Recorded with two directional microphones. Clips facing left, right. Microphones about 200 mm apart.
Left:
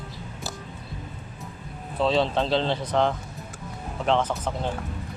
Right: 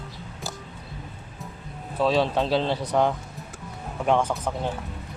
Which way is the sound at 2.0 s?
10° right (ahead or behind).